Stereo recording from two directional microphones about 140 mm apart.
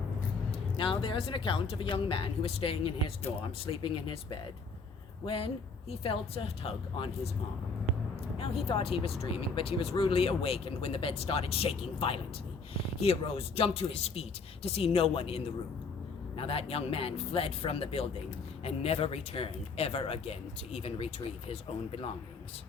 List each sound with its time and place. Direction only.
0.8 s speech: 40° left (ahead or behind)
5.2 s speech: 40° left (ahead or behind)
8.4 s speech: 45° left (ahead or behind)